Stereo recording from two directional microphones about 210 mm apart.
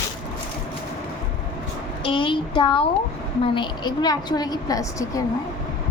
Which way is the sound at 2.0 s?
25° left (ahead or behind).